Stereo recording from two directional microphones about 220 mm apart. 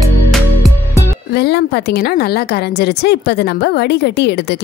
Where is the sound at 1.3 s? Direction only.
50° left (ahead or behind).